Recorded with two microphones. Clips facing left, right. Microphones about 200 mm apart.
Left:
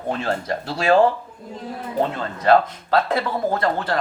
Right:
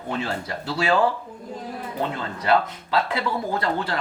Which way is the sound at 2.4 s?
45° left (ahead or behind).